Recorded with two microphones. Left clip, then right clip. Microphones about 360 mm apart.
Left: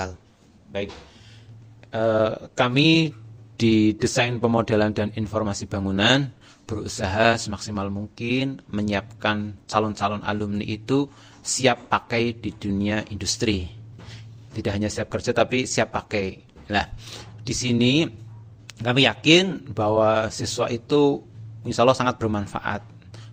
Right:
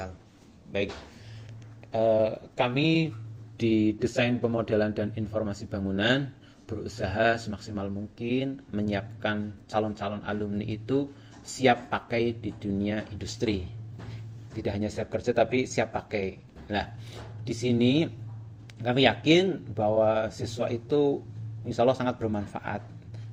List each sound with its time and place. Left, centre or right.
0.7 s speech: centre
1.9 s speech: left
14.6 s speech: left